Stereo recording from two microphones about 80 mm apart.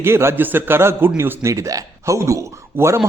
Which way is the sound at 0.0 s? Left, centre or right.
Right.